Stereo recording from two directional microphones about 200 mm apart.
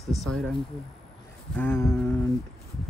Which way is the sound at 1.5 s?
10° left (ahead or behind).